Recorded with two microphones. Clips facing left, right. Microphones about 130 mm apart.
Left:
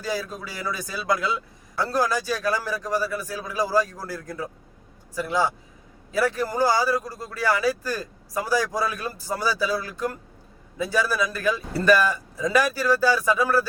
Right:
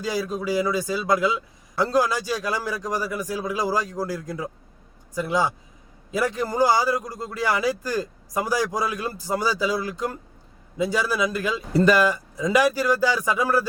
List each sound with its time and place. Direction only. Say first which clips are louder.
0.0 s a man's voice: right 4 dB; 15° right (ahead or behind)